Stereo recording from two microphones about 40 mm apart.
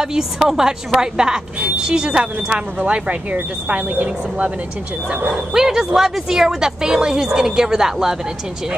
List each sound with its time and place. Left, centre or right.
0.0 s speech: centre
3.6 s a woman's voice: right
5.3 s speech: centre